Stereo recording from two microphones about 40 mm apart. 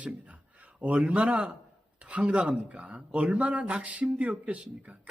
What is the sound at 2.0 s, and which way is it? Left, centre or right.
Speech, right.